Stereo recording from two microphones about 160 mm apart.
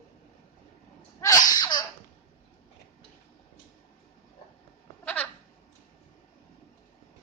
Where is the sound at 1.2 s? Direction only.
20° left (ahead or behind).